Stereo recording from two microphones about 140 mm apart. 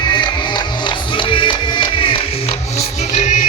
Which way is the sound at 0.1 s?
35° left (ahead or behind).